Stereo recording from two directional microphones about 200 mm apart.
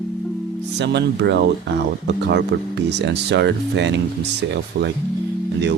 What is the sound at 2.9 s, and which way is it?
Speech, 60° right (ahead or behind).